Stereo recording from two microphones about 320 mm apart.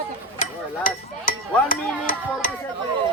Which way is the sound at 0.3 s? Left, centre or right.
Left.